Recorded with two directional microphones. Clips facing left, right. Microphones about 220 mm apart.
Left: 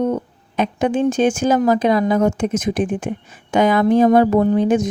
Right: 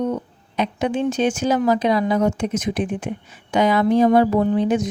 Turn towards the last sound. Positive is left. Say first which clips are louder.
# left 3 dB
turn(degrees=45)  # may be behind; listen again after turning